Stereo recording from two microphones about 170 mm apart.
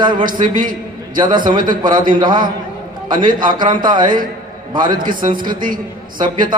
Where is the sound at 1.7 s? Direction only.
25° right (ahead or behind).